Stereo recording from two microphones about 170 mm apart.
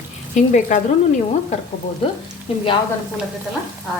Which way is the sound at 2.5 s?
35° left (ahead or behind).